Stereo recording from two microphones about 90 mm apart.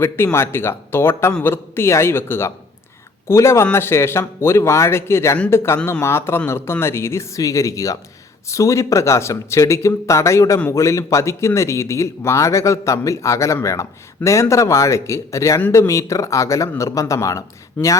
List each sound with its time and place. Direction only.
0.0 s speech: 25° left (ahead or behind)